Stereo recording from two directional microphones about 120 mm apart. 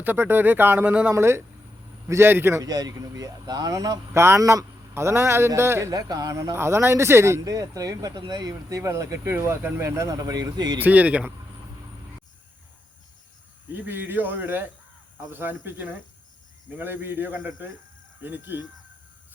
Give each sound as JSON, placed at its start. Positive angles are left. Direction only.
{"t": 0.0, "sound": "speech", "side_deg": -15}
{"t": 5.9, "sound": "speech", "side_deg": -30}
{"t": 10.8, "sound": "speech", "side_deg": -15}
{"t": 13.7, "sound": "speech", "side_deg": -15}